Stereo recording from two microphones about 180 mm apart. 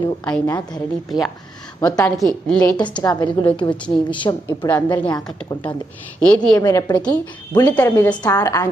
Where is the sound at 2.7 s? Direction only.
25° left (ahead or behind).